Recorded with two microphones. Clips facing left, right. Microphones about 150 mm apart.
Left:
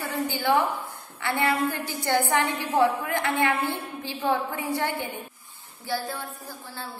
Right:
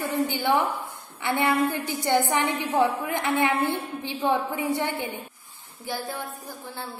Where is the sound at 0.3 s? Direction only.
20° right (ahead or behind).